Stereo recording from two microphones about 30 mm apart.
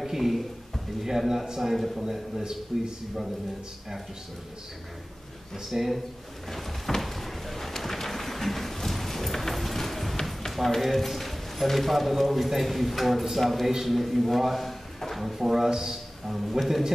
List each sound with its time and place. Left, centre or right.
0.0 s a man's voice: centre
2.7 s a man's voice: right
5.7 s a man's voice: centre
6.5 s a sound: centre
10.8 s a man's voice: centre
16.3 s a man's voice: centre